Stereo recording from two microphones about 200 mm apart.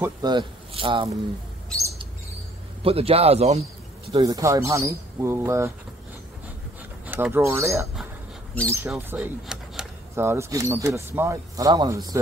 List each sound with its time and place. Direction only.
0.0 s speech: 20° right (ahead or behind)
1.7 s bird: 5° left (ahead or behind)
2.8 s a man's voice: 30° right (ahead or behind)
4.2 s speech: 15° right (ahead or behind)
7.1 s speech: 10° right (ahead or behind)
8.9 s speech: 5° right (ahead or behind); by 12.2 s 20° right (ahead or behind)